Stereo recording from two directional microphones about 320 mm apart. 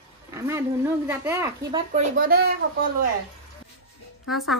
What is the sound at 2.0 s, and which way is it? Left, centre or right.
Speech, right.